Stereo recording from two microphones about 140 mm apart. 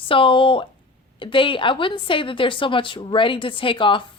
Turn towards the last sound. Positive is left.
turn(degrees=35)  # may be behind; listen again after turning